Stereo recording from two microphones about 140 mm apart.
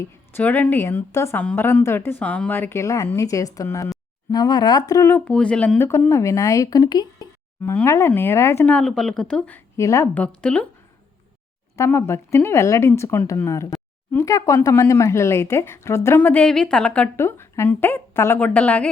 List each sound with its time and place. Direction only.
0.0 s speech: 15° left (ahead or behind)
5.3 s speech: 5° left (ahead or behind); by 7.3 s 30° left (ahead or behind)
7.9 s speech: 20° left (ahead or behind)
8.7 s speech: centre (ahead or behind); by 10.1 s 20° left (ahead or behind)
10.2 s speech: 5° left (ahead or behind)
11.8 s speech: 20° left (ahead or behind)